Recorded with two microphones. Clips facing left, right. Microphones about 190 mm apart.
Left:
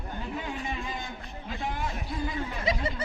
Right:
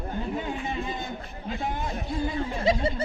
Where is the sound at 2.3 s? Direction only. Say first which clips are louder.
Right 6 dB; 30° right (ahead or behind).